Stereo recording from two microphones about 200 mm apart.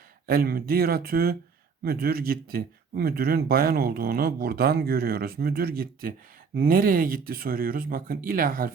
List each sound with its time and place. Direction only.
0.3 s speech: 50° right (ahead or behind)